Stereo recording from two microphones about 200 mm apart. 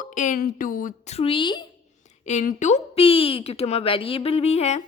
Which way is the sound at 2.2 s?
40° left (ahead or behind).